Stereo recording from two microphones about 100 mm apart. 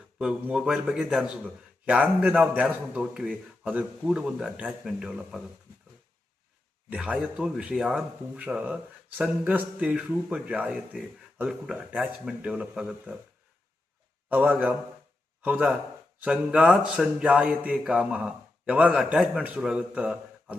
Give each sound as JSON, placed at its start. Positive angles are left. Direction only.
{"t": 0.2, "sound": "a man's voice", "side_deg": -10}
{"t": 6.9, "sound": "a man's voice", "side_deg": -10}
{"t": 14.3, "sound": "a man's voice", "side_deg": -15}
{"t": 16.2, "sound": "a man's voice", "side_deg": -10}